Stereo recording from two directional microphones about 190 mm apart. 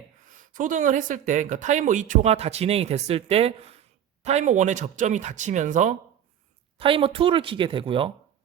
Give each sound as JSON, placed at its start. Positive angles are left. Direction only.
{"t": 0.3, "sound": "speech", "side_deg": -45}
{"t": 6.7, "sound": "speech", "side_deg": -30}